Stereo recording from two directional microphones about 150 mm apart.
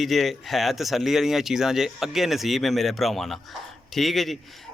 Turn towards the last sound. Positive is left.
turn(degrees=0)  # may be behind; listen again after turning